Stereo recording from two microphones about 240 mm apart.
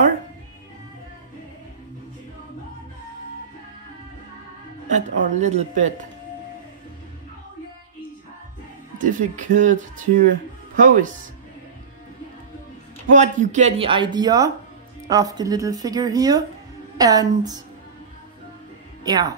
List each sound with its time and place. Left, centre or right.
4.8 s speech: right
8.9 s speech: right
13.1 s speech: right; by 17.6 s centre
19.0 s speech: centre